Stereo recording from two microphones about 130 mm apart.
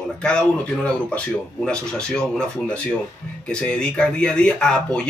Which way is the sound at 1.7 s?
5° left (ahead or behind).